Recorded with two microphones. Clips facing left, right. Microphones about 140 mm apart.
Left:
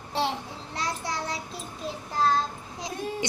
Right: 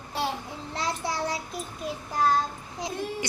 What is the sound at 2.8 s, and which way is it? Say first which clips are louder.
Child singing: even; 20° left (ahead or behind).